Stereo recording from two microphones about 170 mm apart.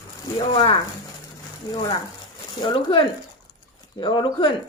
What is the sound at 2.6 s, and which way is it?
Speech, 30° left (ahead or behind).